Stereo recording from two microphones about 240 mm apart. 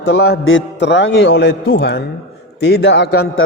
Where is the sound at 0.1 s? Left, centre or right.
Left.